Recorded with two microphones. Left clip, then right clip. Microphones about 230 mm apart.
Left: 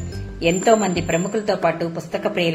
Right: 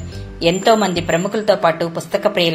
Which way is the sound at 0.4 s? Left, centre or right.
Right.